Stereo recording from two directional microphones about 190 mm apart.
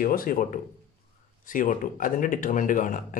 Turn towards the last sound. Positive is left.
turn(degrees=45)  # may be behind; listen again after turning